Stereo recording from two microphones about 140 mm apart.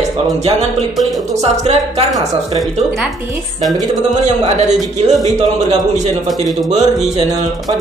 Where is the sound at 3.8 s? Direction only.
60° right (ahead or behind).